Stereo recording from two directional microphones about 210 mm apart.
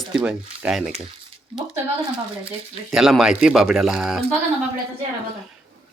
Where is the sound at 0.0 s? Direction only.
5° right (ahead or behind).